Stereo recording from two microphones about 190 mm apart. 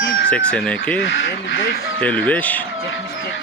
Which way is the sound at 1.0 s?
75° left (ahead or behind).